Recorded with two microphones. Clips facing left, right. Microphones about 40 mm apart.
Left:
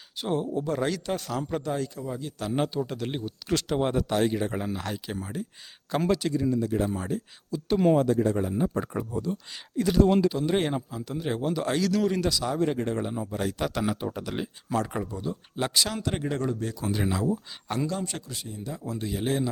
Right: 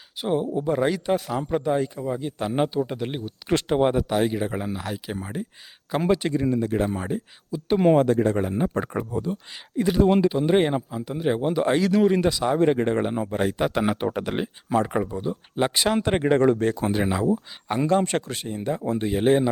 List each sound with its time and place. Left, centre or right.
0.2 s speech: centre
2.6 s speech: centre
3.5 s speech: right; by 5.1 s centre
5.1 s speech: right
6.1 s speech: right
7.1 s speech: right
7.9 s speech: right
9.1 s speech: right
13.5 s speech: right
13.8 s speech: right
14.3 s speech: right
16.9 s speech: right
17.8 s speech: right